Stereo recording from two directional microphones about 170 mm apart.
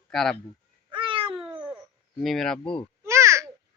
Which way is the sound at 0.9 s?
30° right (ahead or behind).